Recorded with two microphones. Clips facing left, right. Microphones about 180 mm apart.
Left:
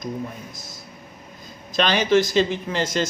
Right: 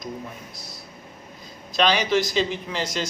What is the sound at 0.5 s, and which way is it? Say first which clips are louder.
A man's voice: left 1 dB; 45° left (ahead or behind).